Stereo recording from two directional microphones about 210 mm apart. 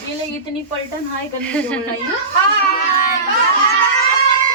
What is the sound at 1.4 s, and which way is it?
Speech, 5° left (ahead or behind).